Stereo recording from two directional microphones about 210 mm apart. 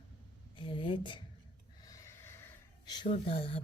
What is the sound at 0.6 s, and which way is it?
Speech, 25° left (ahead or behind).